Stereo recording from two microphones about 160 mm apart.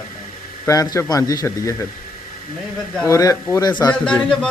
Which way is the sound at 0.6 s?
20° left (ahead or behind).